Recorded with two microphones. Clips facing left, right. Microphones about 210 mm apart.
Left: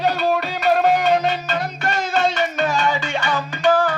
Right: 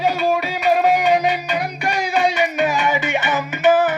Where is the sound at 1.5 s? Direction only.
15° right (ahead or behind).